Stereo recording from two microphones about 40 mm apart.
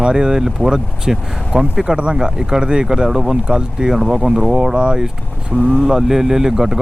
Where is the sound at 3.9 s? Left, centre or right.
Centre.